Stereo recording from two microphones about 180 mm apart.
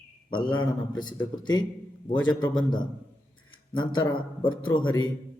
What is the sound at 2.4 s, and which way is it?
A man's voice, 25° left (ahead or behind).